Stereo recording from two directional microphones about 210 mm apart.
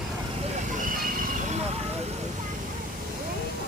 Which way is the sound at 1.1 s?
40° right (ahead or behind).